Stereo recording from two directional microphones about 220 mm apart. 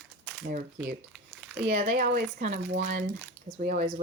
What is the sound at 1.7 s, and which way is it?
Speech, 30° right (ahead or behind).